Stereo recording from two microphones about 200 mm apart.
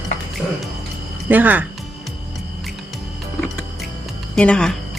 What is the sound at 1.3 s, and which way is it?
Speech, 10° right (ahead or behind).